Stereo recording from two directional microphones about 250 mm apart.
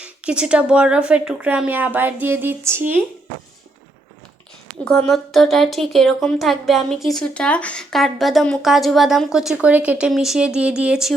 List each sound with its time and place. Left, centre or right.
0.0 s speech: centre
4.9 s speech: centre